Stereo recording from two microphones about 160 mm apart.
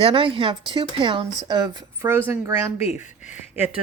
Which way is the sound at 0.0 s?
35° right (ahead or behind).